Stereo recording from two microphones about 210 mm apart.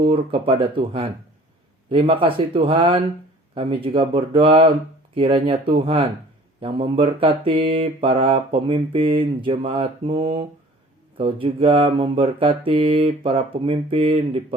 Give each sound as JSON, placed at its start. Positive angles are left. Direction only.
{"t": 0.1, "sound": "mantra", "side_deg": -25}